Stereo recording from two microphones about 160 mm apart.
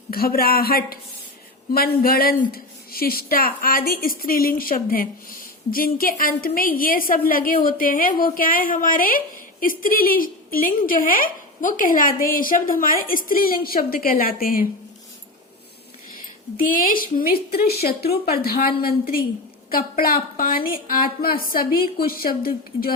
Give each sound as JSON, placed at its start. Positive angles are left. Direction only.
{"t": 0.1, "sound": "a woman's voice", "side_deg": 70}
{"t": 16.6, "sound": "a woman's voice", "side_deg": 60}